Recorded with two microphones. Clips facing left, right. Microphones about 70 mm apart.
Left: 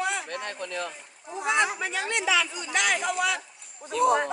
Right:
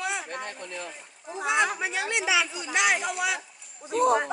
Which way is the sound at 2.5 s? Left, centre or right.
Left.